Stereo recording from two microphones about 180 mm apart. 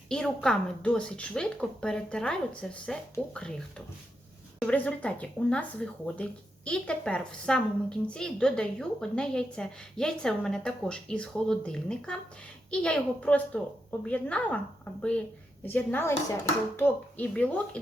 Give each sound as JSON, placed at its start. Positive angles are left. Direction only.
{"t": 0.1, "sound": "a woman's voice", "side_deg": 5}
{"t": 15.6, "sound": "speech", "side_deg": 10}